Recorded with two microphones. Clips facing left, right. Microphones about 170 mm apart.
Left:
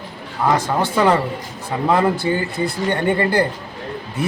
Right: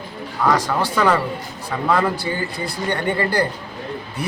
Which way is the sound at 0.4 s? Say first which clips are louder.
Left 1 dB; 25° left (ahead or behind).